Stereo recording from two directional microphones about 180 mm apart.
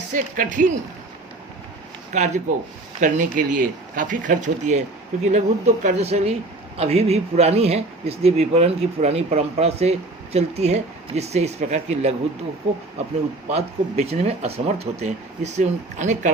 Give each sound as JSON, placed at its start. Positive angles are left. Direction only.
{"t": 0.1, "sound": "speech", "side_deg": -45}
{"t": 2.1, "sound": "a man's voice", "side_deg": -40}
{"t": 13.5, "sound": "a man's voice", "side_deg": -35}